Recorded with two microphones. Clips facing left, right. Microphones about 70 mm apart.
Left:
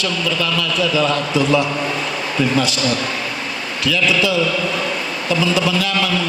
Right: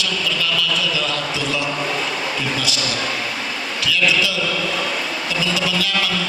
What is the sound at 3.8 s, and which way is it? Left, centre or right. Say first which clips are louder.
Speech: left 3 dB; left.